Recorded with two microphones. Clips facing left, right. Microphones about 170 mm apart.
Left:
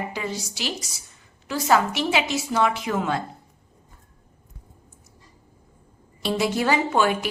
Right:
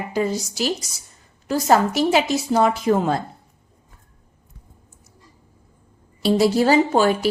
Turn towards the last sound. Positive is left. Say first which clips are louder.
# right 5 dB
turn(degrees=-35)  # may be behind; listen again after turning